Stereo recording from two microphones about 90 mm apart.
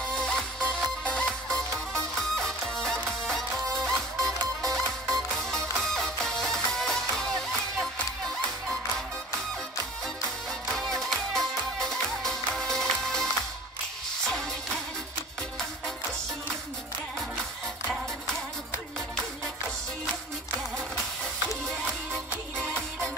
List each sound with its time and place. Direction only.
0.2 s music: 10° left (ahead or behind)
10.7 s music: 5° left (ahead or behind)
17.8 s music: 5° left (ahead or behind)